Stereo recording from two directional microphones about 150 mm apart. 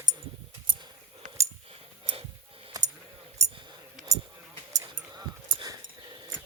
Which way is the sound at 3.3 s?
25° right (ahead or behind).